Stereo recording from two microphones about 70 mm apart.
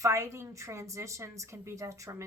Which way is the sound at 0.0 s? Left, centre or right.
Right.